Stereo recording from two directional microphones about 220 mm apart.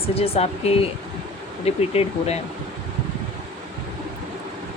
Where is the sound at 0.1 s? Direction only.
25° left (ahead or behind).